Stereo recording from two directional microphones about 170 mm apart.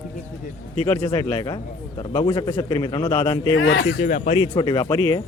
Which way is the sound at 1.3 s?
25° left (ahead or behind).